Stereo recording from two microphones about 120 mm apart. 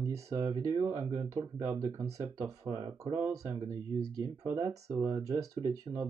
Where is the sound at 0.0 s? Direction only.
25° right (ahead or behind).